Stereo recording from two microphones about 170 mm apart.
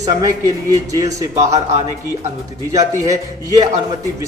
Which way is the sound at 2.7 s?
20° right (ahead or behind).